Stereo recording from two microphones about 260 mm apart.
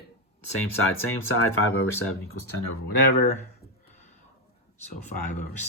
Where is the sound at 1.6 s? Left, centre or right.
Left.